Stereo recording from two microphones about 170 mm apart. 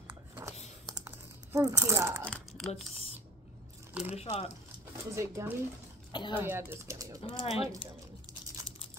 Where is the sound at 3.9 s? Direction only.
5° right (ahead or behind).